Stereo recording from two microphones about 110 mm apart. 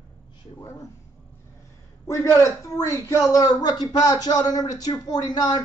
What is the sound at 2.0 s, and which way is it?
A man's voice, 30° left (ahead or behind).